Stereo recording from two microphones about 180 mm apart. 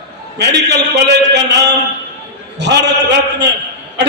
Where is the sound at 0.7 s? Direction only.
70° right (ahead or behind).